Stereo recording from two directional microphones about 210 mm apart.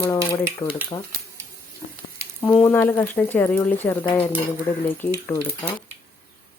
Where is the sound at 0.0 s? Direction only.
10° left (ahead or behind).